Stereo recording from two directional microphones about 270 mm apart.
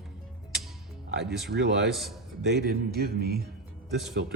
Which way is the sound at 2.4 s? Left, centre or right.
Right.